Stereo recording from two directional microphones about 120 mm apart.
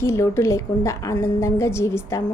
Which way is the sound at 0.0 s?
20° left (ahead or behind).